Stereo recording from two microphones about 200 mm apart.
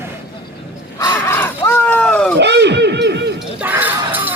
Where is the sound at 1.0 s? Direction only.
10° left (ahead or behind).